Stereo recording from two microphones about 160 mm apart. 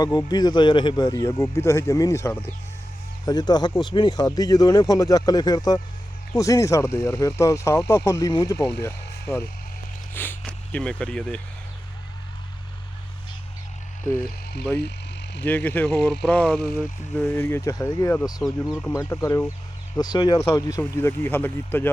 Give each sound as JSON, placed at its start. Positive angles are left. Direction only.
{"t": 0.0, "sound": "speech", "side_deg": 25}
{"t": 15.4, "sound": "speech", "side_deg": 10}
{"t": 18.4, "sound": "speech", "side_deg": 0}
{"t": 18.9, "sound": "speech", "side_deg": 15}